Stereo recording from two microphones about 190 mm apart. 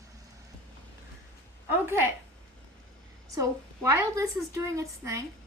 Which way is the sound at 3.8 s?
15° right (ahead or behind).